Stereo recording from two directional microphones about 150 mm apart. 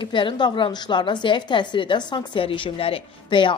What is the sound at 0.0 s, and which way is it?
A woman's voice, 35° left (ahead or behind).